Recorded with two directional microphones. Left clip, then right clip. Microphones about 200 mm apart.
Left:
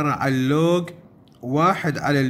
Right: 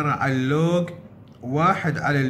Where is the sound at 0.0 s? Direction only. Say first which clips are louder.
Left 1 dB; 40° left (ahead or behind).